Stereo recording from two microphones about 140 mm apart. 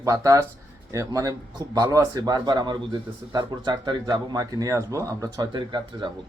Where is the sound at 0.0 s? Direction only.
25° right (ahead or behind).